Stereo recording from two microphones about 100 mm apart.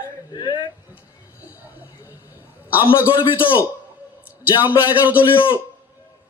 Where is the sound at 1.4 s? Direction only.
15° right (ahead or behind).